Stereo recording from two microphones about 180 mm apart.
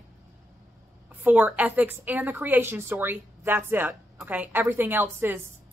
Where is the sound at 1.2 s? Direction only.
10° right (ahead or behind).